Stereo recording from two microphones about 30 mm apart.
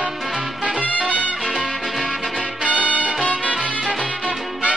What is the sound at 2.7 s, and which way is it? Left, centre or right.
Music, right.